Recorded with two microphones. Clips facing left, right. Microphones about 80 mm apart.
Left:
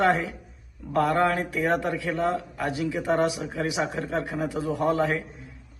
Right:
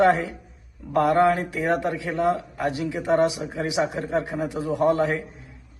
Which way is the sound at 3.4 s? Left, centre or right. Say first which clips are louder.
Right 3 dB; centre.